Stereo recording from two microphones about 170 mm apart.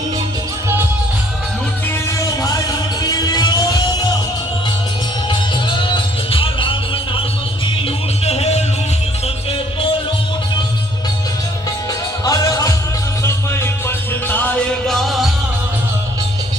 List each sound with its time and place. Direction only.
2.0 s music: 20° left (ahead or behind)
5.3 s music: 30° left (ahead or behind)
8.2 s music: 35° left (ahead or behind)
12.2 s music: 20° left (ahead or behind); by 15.3 s centre (ahead or behind)